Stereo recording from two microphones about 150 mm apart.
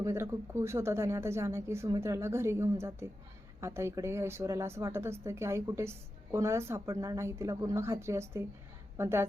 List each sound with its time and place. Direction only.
0.0 s a woman's voice: 20° right (ahead or behind)